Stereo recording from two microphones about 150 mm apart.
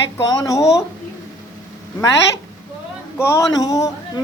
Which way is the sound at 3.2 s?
20° left (ahead or behind).